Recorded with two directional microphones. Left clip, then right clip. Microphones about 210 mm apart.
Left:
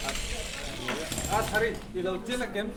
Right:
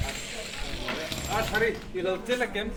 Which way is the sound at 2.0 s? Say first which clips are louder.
Right 4 dB; 40° right (ahead or behind).